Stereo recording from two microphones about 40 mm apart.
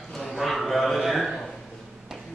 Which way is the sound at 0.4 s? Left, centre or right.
Centre.